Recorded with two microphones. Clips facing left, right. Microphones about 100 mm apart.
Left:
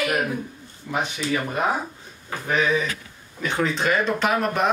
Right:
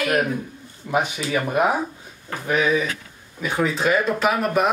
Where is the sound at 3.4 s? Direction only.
5° right (ahead or behind).